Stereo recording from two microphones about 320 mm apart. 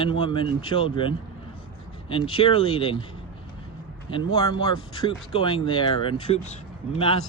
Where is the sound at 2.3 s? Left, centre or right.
Centre.